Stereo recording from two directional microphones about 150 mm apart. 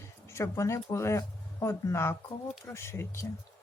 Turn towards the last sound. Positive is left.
turn(degrees=20)  # may be behind; listen again after turning